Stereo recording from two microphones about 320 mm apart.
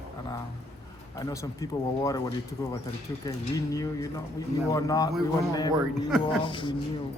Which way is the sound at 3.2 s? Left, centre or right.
Centre.